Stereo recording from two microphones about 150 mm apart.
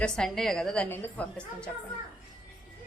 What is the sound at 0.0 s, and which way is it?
A woman's voice, 5° left (ahead or behind).